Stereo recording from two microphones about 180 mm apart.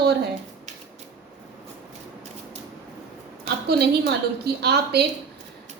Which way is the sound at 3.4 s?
65° right (ahead or behind).